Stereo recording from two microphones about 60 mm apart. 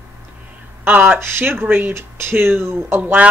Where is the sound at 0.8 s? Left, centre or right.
Right.